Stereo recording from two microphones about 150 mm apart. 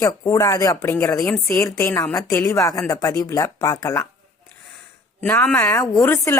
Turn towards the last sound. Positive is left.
turn(degrees=20)  # may be behind; listen again after turning